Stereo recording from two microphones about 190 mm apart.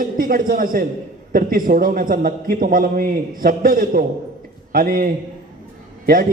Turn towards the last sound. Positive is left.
turn(degrees=-50)  # may be behind; listen again after turning